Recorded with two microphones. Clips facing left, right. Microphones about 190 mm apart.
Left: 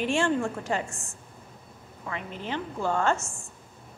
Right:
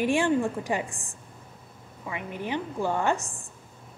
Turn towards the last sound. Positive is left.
turn(degrees=-15)  # may be behind; listen again after turning